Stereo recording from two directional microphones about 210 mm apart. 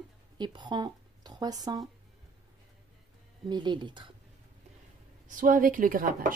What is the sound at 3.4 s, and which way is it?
Speech, 20° right (ahead or behind).